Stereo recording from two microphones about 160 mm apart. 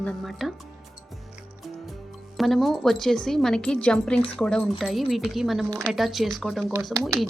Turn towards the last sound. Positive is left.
turn(degrees=0)  # may be behind; listen again after turning